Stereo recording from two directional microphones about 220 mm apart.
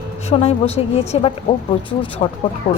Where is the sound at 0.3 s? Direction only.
25° left (ahead or behind).